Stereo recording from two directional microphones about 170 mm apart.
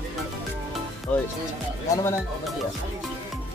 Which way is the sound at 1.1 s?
10° left (ahead or behind).